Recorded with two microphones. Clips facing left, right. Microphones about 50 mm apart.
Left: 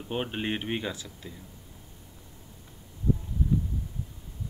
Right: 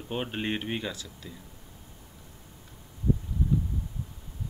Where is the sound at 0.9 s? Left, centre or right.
Left.